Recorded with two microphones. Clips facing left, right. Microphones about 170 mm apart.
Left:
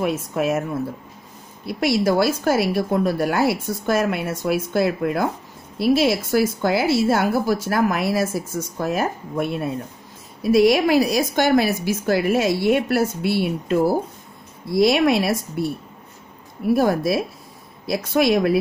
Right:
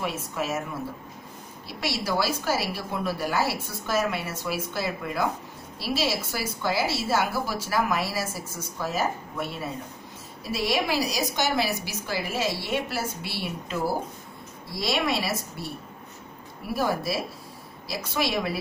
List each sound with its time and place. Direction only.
0.0 s a woman's voice: 55° left (ahead or behind)
1.7 s a woman's voice: 50° left (ahead or behind)
16.7 s a woman's voice: 55° left (ahead or behind)